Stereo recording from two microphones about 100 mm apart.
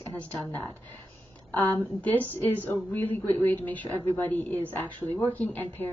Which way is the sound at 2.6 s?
20° left (ahead or behind).